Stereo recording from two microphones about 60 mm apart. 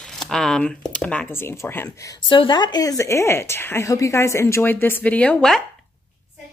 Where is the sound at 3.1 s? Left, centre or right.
Left.